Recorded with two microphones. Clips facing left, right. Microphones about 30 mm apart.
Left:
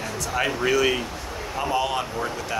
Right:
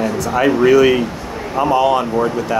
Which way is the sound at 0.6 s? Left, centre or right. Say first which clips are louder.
Right 11 dB; centre.